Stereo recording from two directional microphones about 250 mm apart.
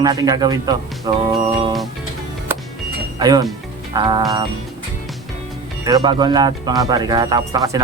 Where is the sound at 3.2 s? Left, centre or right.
Centre.